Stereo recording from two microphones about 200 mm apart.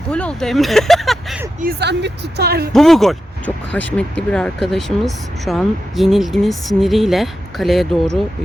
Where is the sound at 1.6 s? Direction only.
55° right (ahead or behind).